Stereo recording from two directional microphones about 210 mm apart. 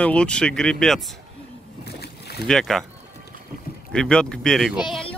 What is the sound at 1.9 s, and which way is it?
Boat, 50° left (ahead or behind).